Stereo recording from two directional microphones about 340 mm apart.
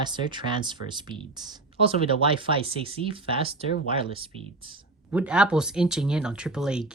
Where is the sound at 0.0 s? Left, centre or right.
Centre.